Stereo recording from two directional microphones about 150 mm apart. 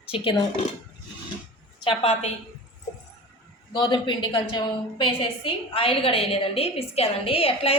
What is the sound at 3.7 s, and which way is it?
A woman's voice, 30° left (ahead or behind).